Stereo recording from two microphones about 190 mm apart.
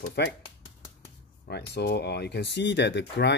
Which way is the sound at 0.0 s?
60° left (ahead or behind).